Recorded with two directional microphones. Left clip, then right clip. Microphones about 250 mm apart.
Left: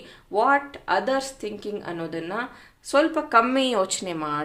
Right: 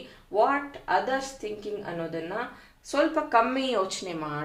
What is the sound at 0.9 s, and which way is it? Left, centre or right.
A woman's voice, left.